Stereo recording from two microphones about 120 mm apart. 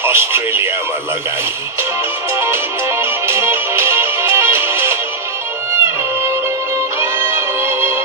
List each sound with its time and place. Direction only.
0.0 s speech: 20° right (ahead or behind)
2.3 s music: 20° right (ahead or behind)